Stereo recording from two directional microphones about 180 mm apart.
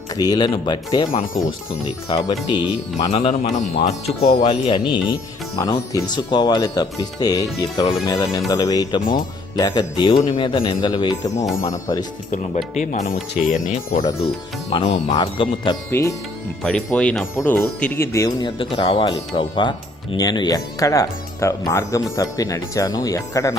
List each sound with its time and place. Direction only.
0.2 s speech: 25° left (ahead or behind)
12.5 s speech: 40° left (ahead or behind)
14.7 s speech: 30° left (ahead or behind)
15.9 s speech: 15° left (ahead or behind)
16.6 s speech: 5° left (ahead or behind)